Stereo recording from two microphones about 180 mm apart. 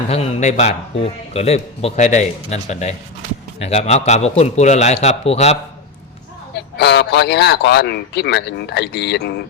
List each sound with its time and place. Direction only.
0.1 s a man's voice: 35° left (ahead or behind)
6.6 s speech: 70° left (ahead or behind)